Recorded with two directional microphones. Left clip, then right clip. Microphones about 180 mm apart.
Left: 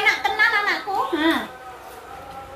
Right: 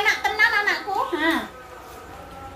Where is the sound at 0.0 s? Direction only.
20° right (ahead or behind).